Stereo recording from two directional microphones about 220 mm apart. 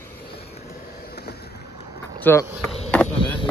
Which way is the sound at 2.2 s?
10° left (ahead or behind).